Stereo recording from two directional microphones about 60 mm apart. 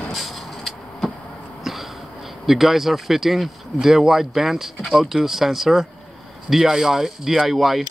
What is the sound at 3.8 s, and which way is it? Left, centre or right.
Speech, centre.